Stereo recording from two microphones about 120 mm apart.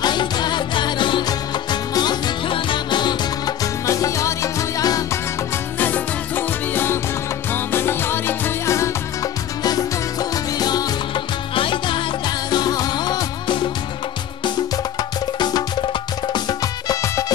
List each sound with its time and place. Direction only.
0.0 s music: 40° left (ahead or behind)
3.8 s music: 25° left (ahead or behind)
5.8 s music: 15° left (ahead or behind); by 12.0 s 45° left (ahead or behind)
12.4 s music: 35° left (ahead or behind)
15.3 s music: 35° left (ahead or behind)